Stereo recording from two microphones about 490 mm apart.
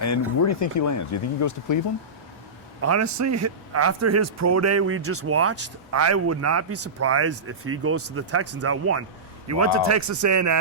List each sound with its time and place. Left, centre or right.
0.0 s speech: left
2.8 s a man's voice: right